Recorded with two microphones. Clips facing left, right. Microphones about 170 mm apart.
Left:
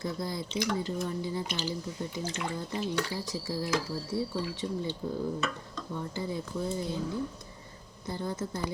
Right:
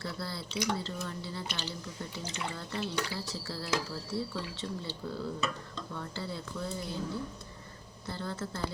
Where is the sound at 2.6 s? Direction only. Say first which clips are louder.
Left 3 dB; 15° left (ahead or behind).